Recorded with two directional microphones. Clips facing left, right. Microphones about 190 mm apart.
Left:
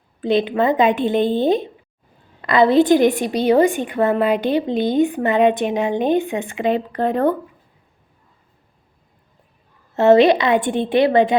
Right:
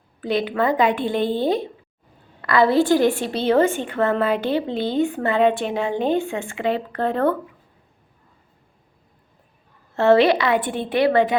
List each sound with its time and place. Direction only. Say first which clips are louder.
0.2 s a woman's voice: left 4 dB; 25° left (ahead or behind)
9.9 s a woman's voice: left 3 dB; 20° left (ahead or behind)